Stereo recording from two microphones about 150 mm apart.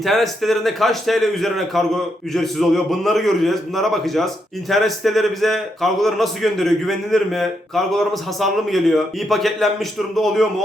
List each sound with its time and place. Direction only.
0.0 s a man's voice: centre (ahead or behind)